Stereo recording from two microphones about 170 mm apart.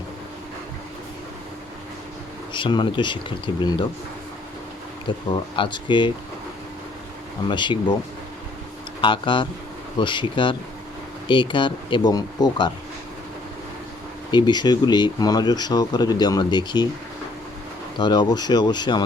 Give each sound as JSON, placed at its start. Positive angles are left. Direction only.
{"t": 2.5, "sound": "speech", "side_deg": 30}
{"t": 5.1, "sound": "speech", "side_deg": 25}
{"t": 7.4, "sound": "speech", "side_deg": 25}
{"t": 9.0, "sound": "speech", "side_deg": 30}
{"t": 14.3, "sound": "speech", "side_deg": 25}
{"t": 17.9, "sound": "speech", "side_deg": 25}